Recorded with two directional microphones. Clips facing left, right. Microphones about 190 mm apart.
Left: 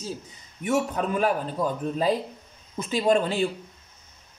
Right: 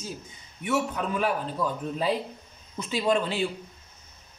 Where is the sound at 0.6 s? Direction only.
45° left (ahead or behind).